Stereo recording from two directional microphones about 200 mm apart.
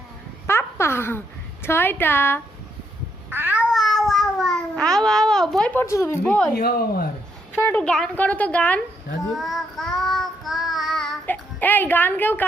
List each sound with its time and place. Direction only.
0.4 s babbling: 10° left (ahead or behind)
1.6 s a woman's voice: 10° left (ahead or behind)
3.2 s cat: 10° right (ahead or behind); by 6.5 s 10° left (ahead or behind)
6.6 s speech: 50° left (ahead or behind)
7.5 s a woman's voice: 10° left (ahead or behind)
9.3 s child singing: centre (ahead or behind)